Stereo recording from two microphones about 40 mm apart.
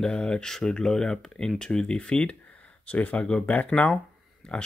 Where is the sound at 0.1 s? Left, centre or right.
Left.